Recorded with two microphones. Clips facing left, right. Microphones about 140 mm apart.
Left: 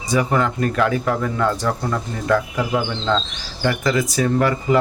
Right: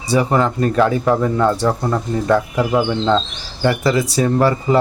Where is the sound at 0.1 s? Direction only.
30° right (ahead or behind).